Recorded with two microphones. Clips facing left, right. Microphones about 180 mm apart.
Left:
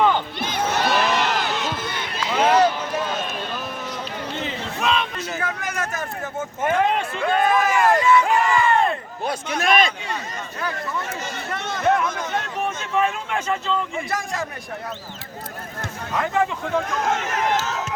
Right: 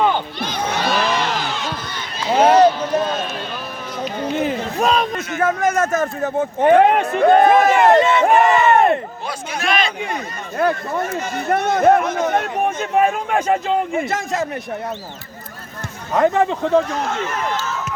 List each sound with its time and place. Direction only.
0.4 s a sound: 5° left (ahead or behind)
2.3 s run: 40° right (ahead or behind)
4.4 s crowd: 45° right (ahead or behind)
5.4 s a sound: 45° right (ahead or behind)
6.6 s speech: 65° right (ahead or behind)
7.0 s speech: 45° right (ahead or behind)
7.8 s speech: 25° right (ahead or behind)
8.3 s crowd: 65° right (ahead or behind)
8.7 s a sound: 65° right (ahead or behind)
10.6 s speech: 55° right (ahead or behind)
14.0 s speech: 25° right (ahead or behind)
16.1 s speech: 35° right (ahead or behind)
17.0 s speech: 45° left (ahead or behind)